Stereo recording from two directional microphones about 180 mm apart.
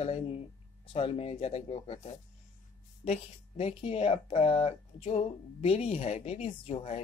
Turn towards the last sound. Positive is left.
turn(degrees=35)  # may be behind; listen again after turning